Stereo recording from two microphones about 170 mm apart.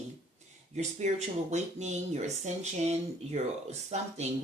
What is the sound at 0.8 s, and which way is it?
Speech, 45° right (ahead or behind).